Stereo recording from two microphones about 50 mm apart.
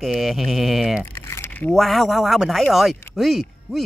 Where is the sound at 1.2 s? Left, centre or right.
Left.